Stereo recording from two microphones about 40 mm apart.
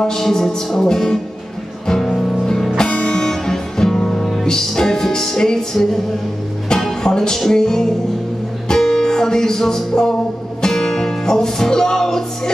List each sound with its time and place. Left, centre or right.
0.0 s music: centre
2.8 s music: left